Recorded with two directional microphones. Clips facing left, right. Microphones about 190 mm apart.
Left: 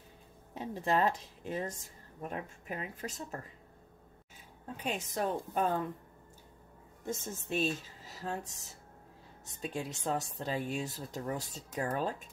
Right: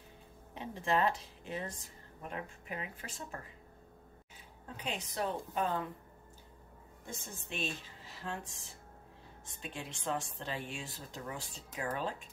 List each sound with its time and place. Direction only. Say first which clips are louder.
0.6 s speech: left 2 dB; 40° left (ahead or behind)
4.7 s a woman's voice: left 3 dB; 45° left (ahead or behind)
7.1 s speech: left 8 dB; 40° left (ahead or behind)